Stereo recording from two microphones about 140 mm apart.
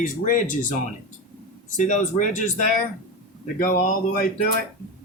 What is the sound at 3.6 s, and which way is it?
Speech, 80° left.